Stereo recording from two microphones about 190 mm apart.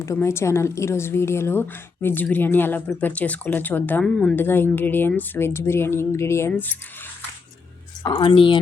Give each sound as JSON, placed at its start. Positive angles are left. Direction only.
{"t": 0.0, "sound": "speech", "side_deg": 15}
{"t": 8.0, "sound": "speech", "side_deg": 25}